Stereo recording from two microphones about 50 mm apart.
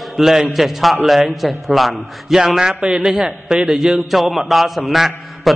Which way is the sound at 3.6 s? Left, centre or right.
Centre.